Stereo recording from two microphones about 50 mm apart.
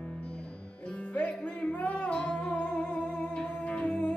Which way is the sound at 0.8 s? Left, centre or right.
Left.